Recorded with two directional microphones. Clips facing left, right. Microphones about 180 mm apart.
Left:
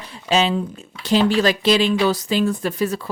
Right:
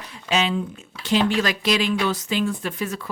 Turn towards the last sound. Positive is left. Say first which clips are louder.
# left 6 dB
turn(degrees=35)  # may be behind; listen again after turning